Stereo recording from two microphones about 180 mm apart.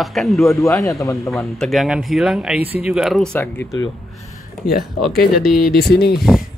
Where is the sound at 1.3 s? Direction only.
Centre (ahead or behind).